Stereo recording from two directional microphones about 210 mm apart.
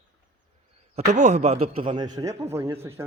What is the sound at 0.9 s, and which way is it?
A man's voice, 30° right (ahead or behind).